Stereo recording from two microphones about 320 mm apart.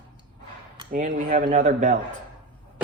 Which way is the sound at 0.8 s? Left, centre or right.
Right.